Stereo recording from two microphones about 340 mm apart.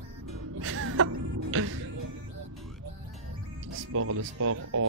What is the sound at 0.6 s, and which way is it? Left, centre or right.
Music, right.